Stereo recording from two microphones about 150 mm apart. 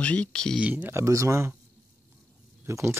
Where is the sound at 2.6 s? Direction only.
15° right (ahead or behind).